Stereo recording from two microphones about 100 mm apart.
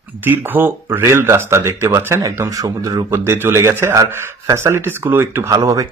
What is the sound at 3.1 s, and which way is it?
Speech, 25° right (ahead or behind).